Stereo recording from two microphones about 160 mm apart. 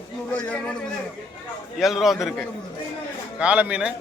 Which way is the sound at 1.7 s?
5° right (ahead or behind).